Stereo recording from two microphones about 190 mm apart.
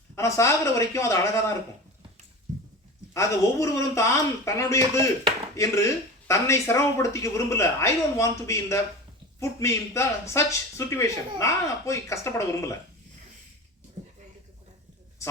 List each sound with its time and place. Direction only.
0.2 s speech: 15° left (ahead or behind)
3.2 s speech: 15° left (ahead or behind)
14.0 s a sound: 40° right (ahead or behind)